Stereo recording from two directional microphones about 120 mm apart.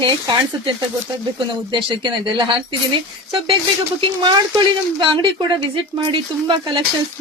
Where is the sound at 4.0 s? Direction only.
45° right (ahead or behind).